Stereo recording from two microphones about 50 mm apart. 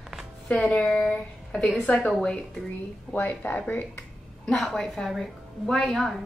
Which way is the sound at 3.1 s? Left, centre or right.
Left.